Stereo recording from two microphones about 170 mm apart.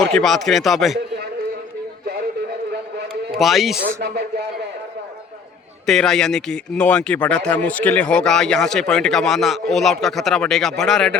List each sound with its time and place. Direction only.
0.0 s speech: centre (ahead or behind)
3.3 s speech: centre (ahead or behind)
4.0 s speech: 70° right (ahead or behind)
5.8 s speech: 5° left (ahead or behind)